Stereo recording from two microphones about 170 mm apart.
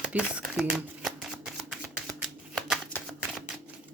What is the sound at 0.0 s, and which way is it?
Shuffling cards, 5° right (ahead or behind).